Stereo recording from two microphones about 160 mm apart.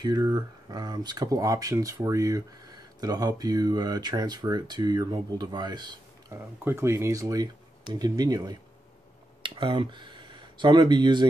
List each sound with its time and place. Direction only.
0.0 s speech: 25° right (ahead or behind)